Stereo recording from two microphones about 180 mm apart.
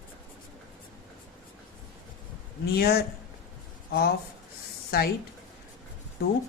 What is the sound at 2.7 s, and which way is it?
Speech, 60° left (ahead or behind).